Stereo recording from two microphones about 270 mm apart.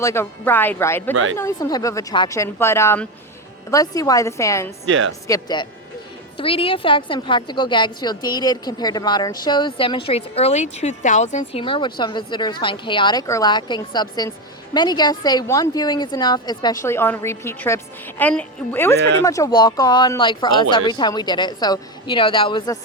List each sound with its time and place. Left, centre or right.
0.0 s a woman's voice: centre
1.1 s speech: right
1.4 s a woman's voice: centre
4.9 s speech: right
5.3 s a woman's voice: centre
18.9 s speech: right
19.2 s a woman's voice: centre